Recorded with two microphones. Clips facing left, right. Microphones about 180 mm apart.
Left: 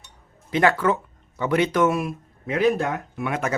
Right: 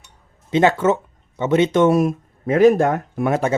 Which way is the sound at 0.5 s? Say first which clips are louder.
Right 4 dB; 25° right (ahead or behind).